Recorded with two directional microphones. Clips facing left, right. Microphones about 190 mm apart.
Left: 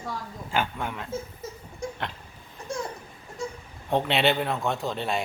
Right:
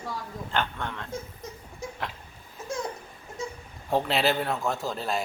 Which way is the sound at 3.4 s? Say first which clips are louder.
Left 2 dB; centre (ahead or behind).